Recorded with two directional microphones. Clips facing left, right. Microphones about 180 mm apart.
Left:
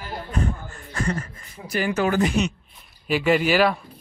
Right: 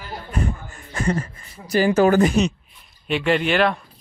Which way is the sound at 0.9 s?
25° right (ahead or behind).